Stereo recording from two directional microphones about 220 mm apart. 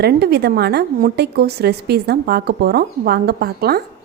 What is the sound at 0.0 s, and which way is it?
A woman's voice, 45° right (ahead or behind).